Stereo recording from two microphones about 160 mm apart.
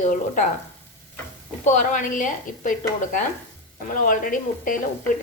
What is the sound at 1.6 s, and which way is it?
A woman's voice, 50° left (ahead or behind).